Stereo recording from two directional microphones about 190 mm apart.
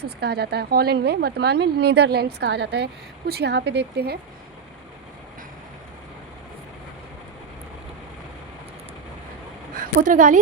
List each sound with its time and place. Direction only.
0.2 s speech: 60° right (ahead or behind)
10.0 s speech: 40° right (ahead or behind)